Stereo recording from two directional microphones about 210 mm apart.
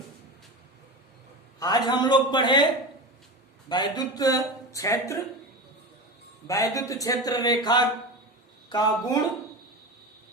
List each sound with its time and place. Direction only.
1.5 s a man's voice: 20° left (ahead or behind)
3.7 s speech: 20° left (ahead or behind)
6.5 s a man's voice: 15° left (ahead or behind)